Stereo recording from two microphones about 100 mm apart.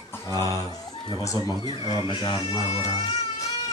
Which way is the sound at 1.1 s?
40° left (ahead or behind).